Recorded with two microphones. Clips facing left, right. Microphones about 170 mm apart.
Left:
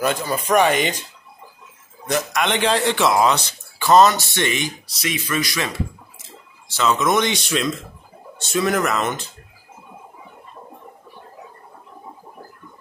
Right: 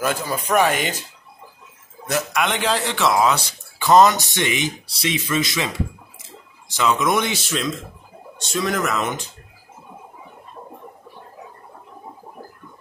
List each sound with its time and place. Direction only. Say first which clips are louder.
0.0 s a man's voice: left 2 dB; 5° right (ahead or behind)
2.0 s a man's voice: left 1 dB; 5° right (ahead or behind)
3.8 s speech: even; 15° right (ahead or behind)
4.8 s speech: right 2 dB; 30° right (ahead or behind)
6.7 s a man's voice: left 1 dB; 15° right (ahead or behind)